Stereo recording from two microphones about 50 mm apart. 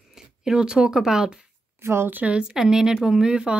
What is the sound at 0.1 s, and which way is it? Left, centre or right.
Speech, centre.